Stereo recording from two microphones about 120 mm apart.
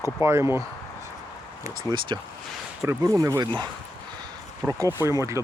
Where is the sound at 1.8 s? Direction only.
40° right (ahead or behind).